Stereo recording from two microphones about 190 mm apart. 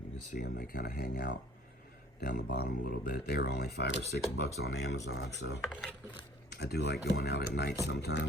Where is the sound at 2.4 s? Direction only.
55° left (ahead or behind).